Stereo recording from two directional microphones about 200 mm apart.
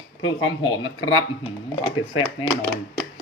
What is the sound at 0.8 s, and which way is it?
Speech, 90° left.